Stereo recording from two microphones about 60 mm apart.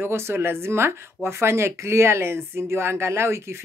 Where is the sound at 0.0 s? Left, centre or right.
Right.